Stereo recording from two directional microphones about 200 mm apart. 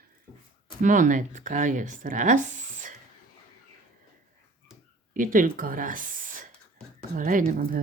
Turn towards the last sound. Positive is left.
turn(degrees=-45)  # may be behind; listen again after turning